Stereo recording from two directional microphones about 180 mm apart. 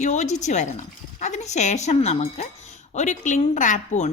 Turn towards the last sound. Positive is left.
turn(degrees=45)  # may be behind; listen again after turning